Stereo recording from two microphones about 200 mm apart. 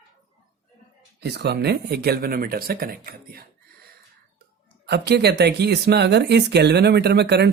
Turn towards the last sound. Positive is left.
turn(degrees=-55)  # may be behind; listen again after turning